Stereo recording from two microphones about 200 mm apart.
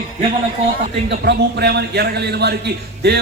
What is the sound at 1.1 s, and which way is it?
A man's voice, 55° right (ahead or behind).